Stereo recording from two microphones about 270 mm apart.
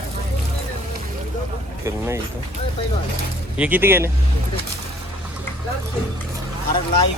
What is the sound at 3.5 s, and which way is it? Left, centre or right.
Speech, centre.